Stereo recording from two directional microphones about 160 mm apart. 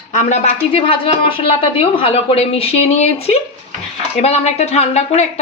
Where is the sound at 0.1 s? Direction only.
45° left (ahead or behind).